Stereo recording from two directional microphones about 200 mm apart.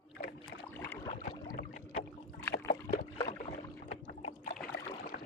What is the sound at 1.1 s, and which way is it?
Boat, 45° left (ahead or behind).